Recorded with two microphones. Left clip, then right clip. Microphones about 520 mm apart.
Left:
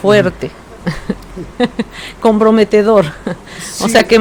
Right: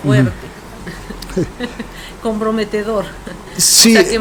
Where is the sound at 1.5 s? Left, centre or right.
Left.